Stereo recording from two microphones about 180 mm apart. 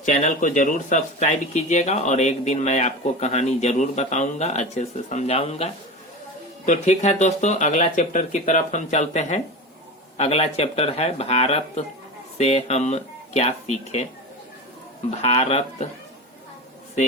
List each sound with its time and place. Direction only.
0.0 s speech: 40° left (ahead or behind)
15.2 s speech: 35° left (ahead or behind)